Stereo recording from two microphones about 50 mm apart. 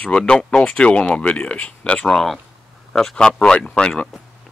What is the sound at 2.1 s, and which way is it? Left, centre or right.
Speech, centre.